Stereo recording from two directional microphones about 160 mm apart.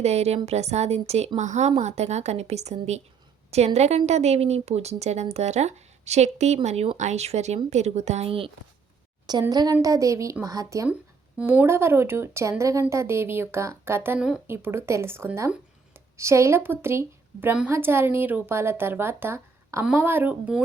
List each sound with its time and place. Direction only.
0.0 s speech: 40° right (ahead or behind)
9.5 s a woman's voice: 25° right (ahead or behind)
11.3 s a woman's voice: 10° right (ahead or behind)